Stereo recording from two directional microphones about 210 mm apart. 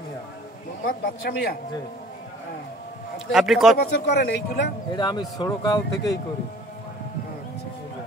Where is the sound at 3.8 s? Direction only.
50° left (ahead or behind).